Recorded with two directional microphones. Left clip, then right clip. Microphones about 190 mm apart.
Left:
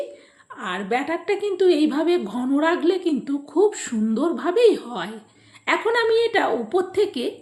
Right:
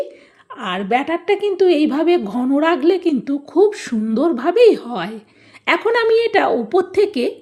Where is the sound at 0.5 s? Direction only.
35° right (ahead or behind).